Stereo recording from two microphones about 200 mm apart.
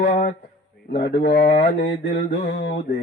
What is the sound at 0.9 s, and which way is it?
A man's voice, 50° left (ahead or behind).